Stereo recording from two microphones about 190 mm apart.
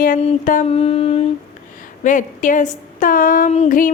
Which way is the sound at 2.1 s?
40° left (ahead or behind).